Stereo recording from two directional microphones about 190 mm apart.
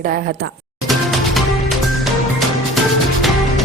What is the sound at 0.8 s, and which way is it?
Music, centre (ahead or behind).